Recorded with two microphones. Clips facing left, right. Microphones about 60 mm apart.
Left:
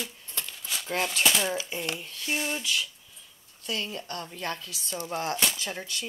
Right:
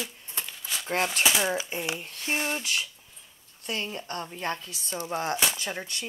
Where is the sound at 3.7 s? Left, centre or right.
Right.